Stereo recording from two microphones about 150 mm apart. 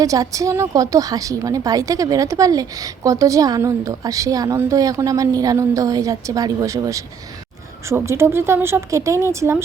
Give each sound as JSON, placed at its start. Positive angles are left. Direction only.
{"t": 0.0, "sound": "a woman's voice", "side_deg": -20}